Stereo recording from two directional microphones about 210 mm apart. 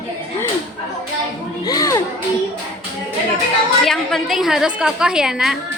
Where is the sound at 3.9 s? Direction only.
Centre (ahead or behind).